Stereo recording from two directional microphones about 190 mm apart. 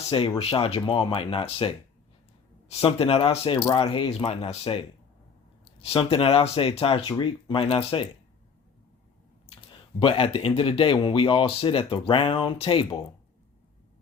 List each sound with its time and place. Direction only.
0.1 s speech: 30° left (ahead or behind)
9.5 s speech: 30° left (ahead or behind)